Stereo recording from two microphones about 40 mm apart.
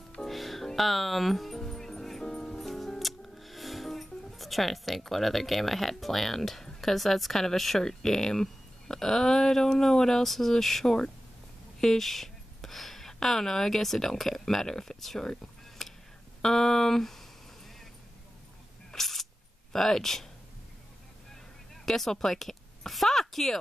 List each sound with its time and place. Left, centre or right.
0.2 s music: centre
2.6 s speech: centre
15.8 s a sound: centre
16.3 s speech: centre
18.9 s a sound: centre
19.7 s speech: centre
21.8 s speech: centre